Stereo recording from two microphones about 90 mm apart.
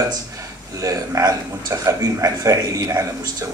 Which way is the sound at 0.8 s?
40° right (ahead or behind).